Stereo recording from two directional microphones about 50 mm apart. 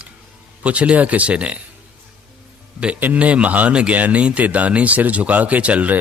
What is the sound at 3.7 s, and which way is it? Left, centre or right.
Speech, centre.